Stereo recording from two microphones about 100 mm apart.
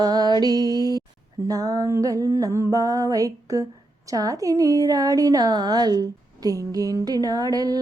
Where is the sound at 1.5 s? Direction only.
40° right (ahead or behind).